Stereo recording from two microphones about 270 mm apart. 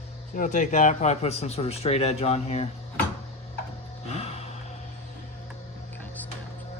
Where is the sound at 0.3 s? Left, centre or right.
Left.